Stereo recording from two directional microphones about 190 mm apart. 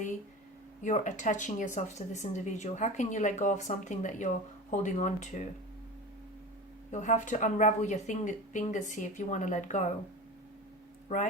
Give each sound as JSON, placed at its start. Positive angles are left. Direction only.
{"t": 0.8, "sound": "speech", "side_deg": 40}
{"t": 6.9, "sound": "speech", "side_deg": 40}